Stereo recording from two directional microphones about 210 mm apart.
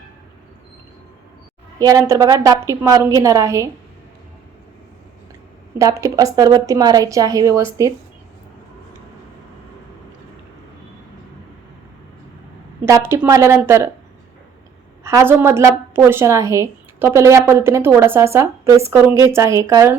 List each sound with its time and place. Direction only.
1.8 s a woman's voice: 15° right (ahead or behind)
5.8 s a woman's voice: 15° right (ahead or behind)
13.1 s a woman's voice: 15° right (ahead or behind)
15.0 s a woman's voice: 10° right (ahead or behind)